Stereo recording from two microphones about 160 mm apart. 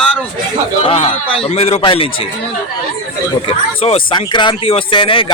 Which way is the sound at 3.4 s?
35° left (ahead or behind).